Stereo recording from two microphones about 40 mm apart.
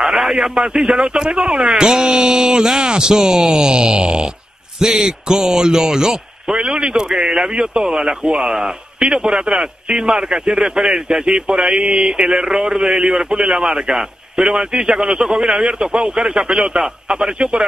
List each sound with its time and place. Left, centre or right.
0.0 s a man's voice: centre
9.0 s a man's voice: centre